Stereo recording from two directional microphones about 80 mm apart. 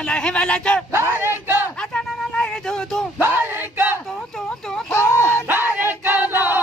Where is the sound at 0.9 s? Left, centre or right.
Right.